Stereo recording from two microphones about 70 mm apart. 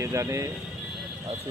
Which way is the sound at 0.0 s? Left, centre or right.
Right.